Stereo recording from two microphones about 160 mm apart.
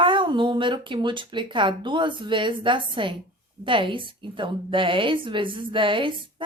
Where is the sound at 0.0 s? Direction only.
30° right (ahead or behind).